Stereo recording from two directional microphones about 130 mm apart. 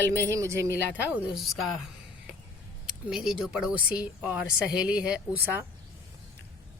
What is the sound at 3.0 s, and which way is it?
Speech, 5° right (ahead or behind).